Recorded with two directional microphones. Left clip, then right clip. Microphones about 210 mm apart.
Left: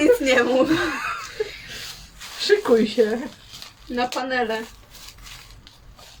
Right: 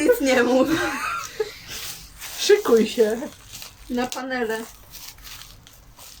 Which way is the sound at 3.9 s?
5° left (ahead or behind).